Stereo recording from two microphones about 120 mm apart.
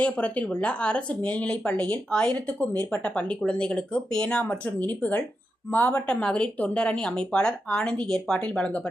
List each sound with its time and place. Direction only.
0.0 s speech: 10° left (ahead or behind)